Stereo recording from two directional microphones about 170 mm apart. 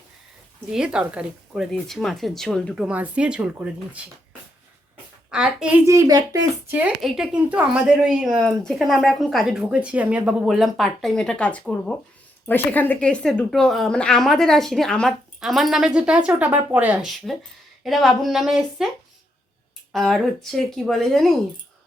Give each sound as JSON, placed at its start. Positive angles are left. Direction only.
{"t": 0.7, "sound": "a woman's voice", "side_deg": -5}
{"t": 5.3, "sound": "a woman's voice", "side_deg": -5}
{"t": 5.8, "sound": "a child's voice", "side_deg": -20}
{"t": 6.7, "sound": "a woman's voice", "side_deg": -10}
{"t": 19.9, "sound": "a woman's voice", "side_deg": 0}